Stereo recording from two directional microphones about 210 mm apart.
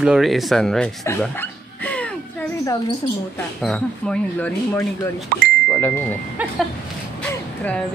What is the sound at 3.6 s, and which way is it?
Speech, 5° left (ahead or behind).